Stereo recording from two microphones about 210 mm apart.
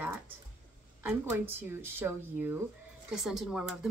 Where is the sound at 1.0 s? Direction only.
10° right (ahead or behind).